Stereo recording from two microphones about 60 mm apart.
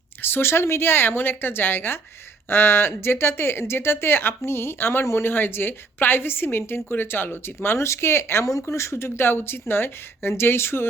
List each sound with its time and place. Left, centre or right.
0.2 s a woman's voice: left